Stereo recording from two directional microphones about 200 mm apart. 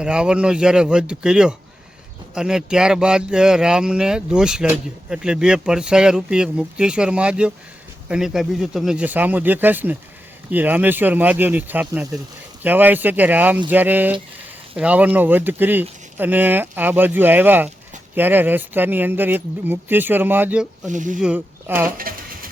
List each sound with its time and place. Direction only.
0.0 s speech: 5° right (ahead or behind)
20.9 s speech: 40° right (ahead or behind)
21.2 s speech: 5° right (ahead or behind)
21.9 s a sound: 45° right (ahead or behind)